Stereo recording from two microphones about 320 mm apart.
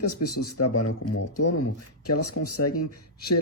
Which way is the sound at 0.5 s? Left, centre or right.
Left.